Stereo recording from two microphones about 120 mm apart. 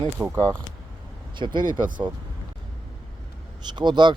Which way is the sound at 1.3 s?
40° right (ahead or behind).